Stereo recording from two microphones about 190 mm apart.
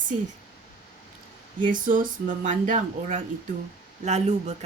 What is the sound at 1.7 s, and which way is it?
A woman's voice, 45° right (ahead or behind).